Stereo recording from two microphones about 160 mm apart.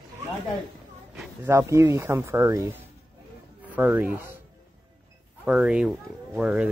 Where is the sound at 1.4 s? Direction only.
15° right (ahead or behind).